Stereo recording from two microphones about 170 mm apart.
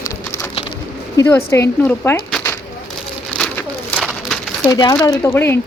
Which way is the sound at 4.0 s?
5° right (ahead or behind).